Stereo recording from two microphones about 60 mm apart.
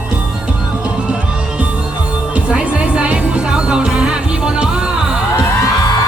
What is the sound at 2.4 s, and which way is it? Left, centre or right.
Music, right.